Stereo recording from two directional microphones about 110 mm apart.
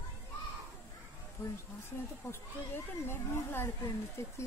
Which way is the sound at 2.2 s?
30° left (ahead or behind).